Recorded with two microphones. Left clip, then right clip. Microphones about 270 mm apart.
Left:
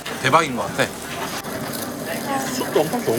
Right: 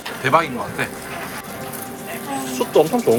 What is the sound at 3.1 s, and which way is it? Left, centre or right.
Speech, centre.